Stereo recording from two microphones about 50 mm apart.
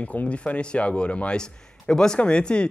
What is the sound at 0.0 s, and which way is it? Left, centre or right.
Speech, left.